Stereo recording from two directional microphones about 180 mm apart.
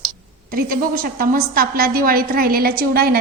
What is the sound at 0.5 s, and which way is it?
A woman's voice, 55° right (ahead or behind).